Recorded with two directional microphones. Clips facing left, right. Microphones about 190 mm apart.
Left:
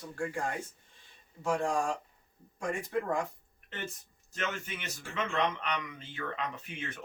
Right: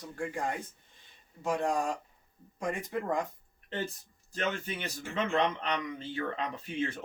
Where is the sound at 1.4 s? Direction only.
20° right (ahead or behind).